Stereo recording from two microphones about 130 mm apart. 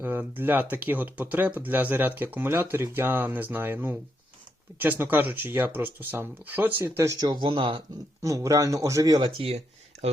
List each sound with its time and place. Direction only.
0.0 s speech: 15° right (ahead or behind)
7.4 s speech: 40° right (ahead or behind)
8.2 s speech: 25° right (ahead or behind)